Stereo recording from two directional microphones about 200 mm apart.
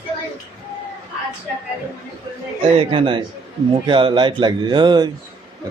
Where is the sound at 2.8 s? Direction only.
25° right (ahead or behind).